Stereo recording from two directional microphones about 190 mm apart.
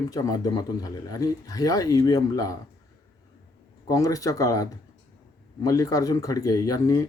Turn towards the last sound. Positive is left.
turn(degrees=20)  # may be behind; listen again after turning